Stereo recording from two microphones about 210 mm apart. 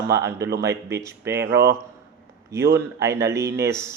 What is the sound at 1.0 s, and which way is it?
Speech, 10° right (ahead or behind).